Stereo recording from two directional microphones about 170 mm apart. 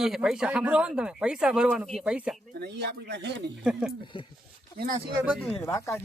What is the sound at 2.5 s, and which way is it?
Speech, 75° right (ahead or behind).